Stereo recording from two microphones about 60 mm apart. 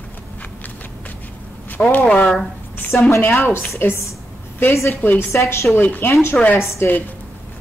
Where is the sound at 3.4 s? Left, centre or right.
Left.